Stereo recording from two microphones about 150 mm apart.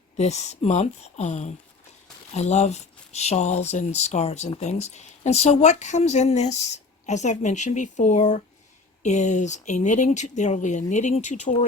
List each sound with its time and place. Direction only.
0.2 s speech: 45° left (ahead or behind)